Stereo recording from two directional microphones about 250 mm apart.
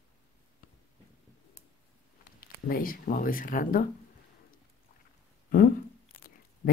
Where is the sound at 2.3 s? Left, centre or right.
Left.